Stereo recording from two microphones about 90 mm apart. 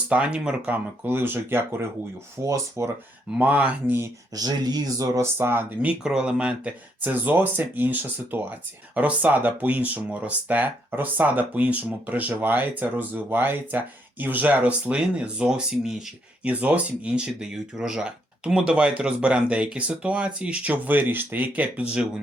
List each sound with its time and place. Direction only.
0.1 s speech: 10° right (ahead or behind); by 2.9 s 30° right (ahead or behind)
3.3 s speech: 15° right (ahead or behind)
4.4 s speech: 50° right (ahead or behind); by 5.6 s 25° right (ahead or behind)
5.8 s speech: 10° right (ahead or behind)
16.5 s speech: 15° right (ahead or behind)